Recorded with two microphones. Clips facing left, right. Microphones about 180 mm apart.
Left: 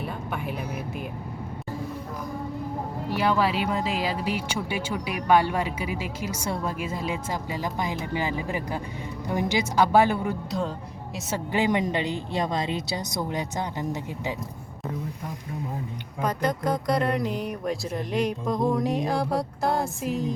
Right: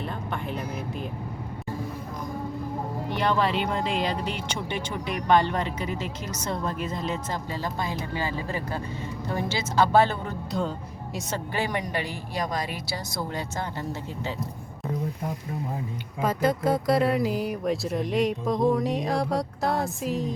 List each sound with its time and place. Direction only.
0.0 s vehicle: 5° left (ahead or behind)
3.1 s speech: 5° left (ahead or behind)
11.5 s a woman's voice: 20° left (ahead or behind)
16.2 s speech: 5° right (ahead or behind)